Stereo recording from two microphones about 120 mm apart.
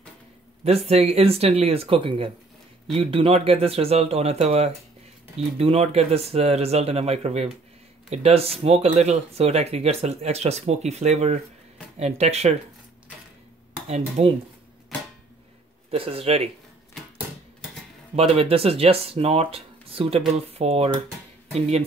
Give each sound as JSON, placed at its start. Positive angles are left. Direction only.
{"t": 0.7, "sound": "speech", "side_deg": -60}
{"t": 13.8, "sound": "speech", "side_deg": -65}
{"t": 15.9, "sound": "speech", "side_deg": -55}
{"t": 18.1, "sound": "speech", "side_deg": -55}